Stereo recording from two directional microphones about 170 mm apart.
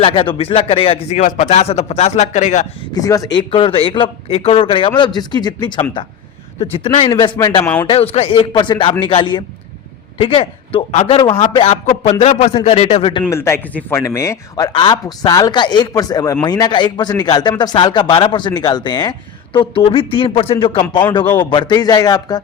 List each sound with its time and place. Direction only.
0.0 s a man's voice: 30° left (ahead or behind)
2.9 s a man's voice: 20° left (ahead or behind)
3.3 s a man's voice: 30° left (ahead or behind)
7.9 s a man's voice: 35° left (ahead or behind)
13.3 s a man's voice: 15° left (ahead or behind)